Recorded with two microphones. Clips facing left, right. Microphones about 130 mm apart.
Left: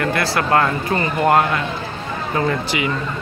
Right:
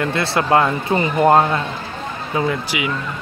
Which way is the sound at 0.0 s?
25° right (ahead or behind).